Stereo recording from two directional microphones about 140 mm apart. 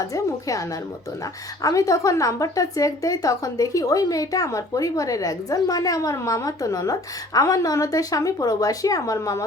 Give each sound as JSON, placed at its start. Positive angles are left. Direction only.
{"t": 0.1, "sound": "a woman's voice", "side_deg": 25}
{"t": 1.6, "sound": "a woman's voice", "side_deg": 25}